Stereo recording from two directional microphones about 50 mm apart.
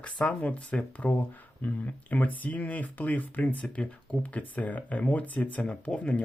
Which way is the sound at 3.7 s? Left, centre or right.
Centre.